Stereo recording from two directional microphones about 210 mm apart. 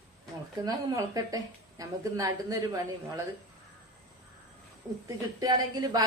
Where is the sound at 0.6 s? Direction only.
20° right (ahead or behind).